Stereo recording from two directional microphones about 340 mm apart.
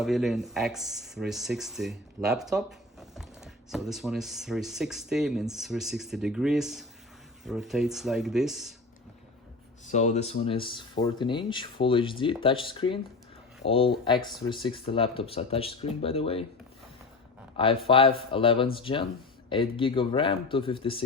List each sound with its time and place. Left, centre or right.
0.0 s speech: centre
9.8 s speech: left
17.6 s speech: centre